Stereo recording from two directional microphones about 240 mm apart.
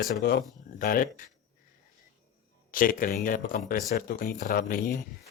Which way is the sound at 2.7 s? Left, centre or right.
Left.